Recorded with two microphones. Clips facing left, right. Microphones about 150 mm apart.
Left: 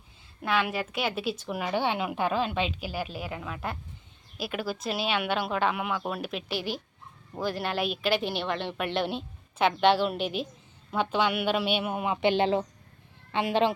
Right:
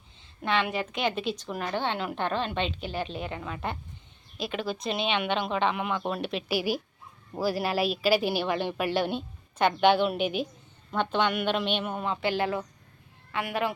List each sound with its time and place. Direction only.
0.4 s a woman's voice: 5° left (ahead or behind)
6.5 s a woman's voice: 10° right (ahead or behind); by 13.7 s 25° left (ahead or behind)